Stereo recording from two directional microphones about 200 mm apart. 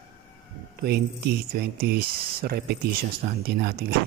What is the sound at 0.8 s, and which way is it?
Speech, 50° right (ahead or behind).